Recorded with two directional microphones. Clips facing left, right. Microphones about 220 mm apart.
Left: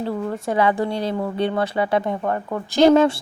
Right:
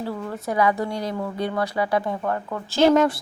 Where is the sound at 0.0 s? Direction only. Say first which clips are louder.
Left 4 dB; 25° left (ahead or behind).